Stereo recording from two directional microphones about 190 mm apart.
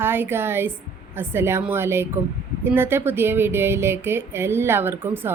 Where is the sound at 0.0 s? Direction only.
10° right (ahead or behind).